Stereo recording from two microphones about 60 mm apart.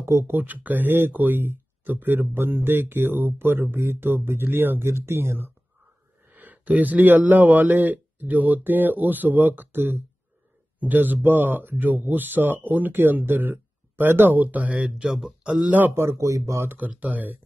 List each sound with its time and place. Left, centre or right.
0.0 s speech: right
0.4 s speech: right
6.3 s speech: right; by 15.3 s centre
15.4 s a man's voice: centre
15.9 s speech: right
16.3 s speech: right
16.6 s speech: right